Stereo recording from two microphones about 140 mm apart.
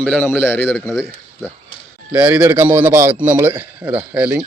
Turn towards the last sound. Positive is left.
turn(degrees=-15)  # may be behind; listen again after turning